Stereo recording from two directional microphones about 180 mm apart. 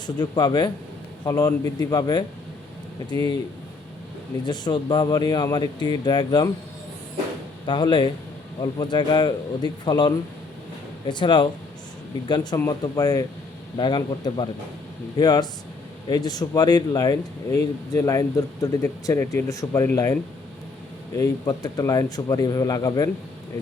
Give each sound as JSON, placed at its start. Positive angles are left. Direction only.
{"t": 0.2, "sound": "speech", "side_deg": 25}
{"t": 4.4, "sound": "speech", "side_deg": 25}
{"t": 7.7, "sound": "speech", "side_deg": 25}
{"t": 21.2, "sound": "speech", "side_deg": 20}